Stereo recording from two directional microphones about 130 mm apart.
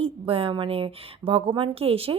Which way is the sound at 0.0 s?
45° right (ahead or behind).